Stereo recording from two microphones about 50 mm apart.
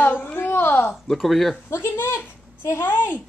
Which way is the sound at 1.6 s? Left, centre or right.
Left.